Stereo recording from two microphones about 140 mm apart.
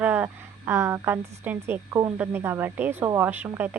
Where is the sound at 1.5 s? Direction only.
15° right (ahead or behind).